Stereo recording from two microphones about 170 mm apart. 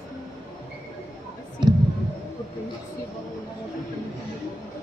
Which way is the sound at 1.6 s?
25° right (ahead or behind).